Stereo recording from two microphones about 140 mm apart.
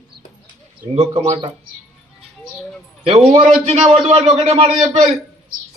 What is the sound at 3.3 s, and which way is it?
Speech, 45° right (ahead or behind).